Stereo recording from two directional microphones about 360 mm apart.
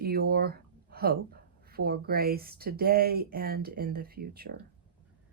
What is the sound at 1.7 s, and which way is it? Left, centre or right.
Speech, right.